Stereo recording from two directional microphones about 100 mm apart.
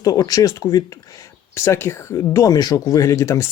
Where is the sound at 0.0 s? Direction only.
35° left (ahead or behind).